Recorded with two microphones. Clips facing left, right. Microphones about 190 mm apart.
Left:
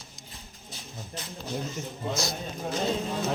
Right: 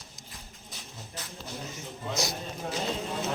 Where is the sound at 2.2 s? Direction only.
15° right (ahead or behind).